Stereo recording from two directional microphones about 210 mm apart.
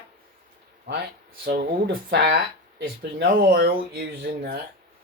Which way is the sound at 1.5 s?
50° right (ahead or behind).